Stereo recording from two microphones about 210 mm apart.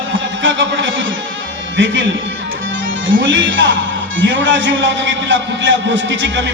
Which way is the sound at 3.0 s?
65° right (ahead or behind).